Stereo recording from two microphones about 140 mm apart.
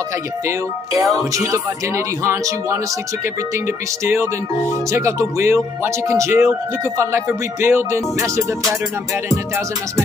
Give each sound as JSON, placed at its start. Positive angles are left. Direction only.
{"t": 0.5, "sound": "speech", "side_deg": -20}